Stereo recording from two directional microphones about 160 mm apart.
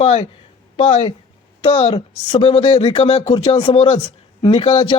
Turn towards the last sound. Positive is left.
turn(degrees=35)  # may be behind; listen again after turning